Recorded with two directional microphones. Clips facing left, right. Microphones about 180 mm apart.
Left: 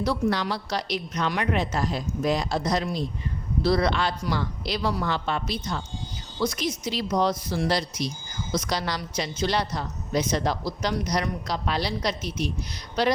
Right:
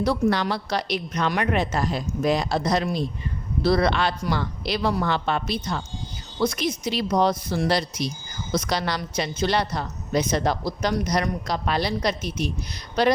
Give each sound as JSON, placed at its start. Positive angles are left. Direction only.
{"t": 0.0, "sound": "a woman's voice", "side_deg": -60}